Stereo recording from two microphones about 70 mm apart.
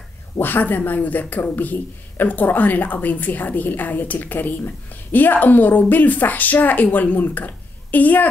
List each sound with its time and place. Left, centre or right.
0.4 s a woman's voice: left